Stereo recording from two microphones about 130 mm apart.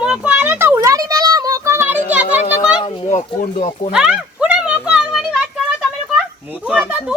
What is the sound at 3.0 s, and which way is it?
Speech, 70° left (ahead or behind).